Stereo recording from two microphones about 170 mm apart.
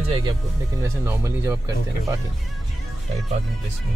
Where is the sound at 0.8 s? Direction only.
15° right (ahead or behind).